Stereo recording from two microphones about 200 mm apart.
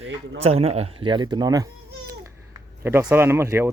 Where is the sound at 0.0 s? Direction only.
30° right (ahead or behind).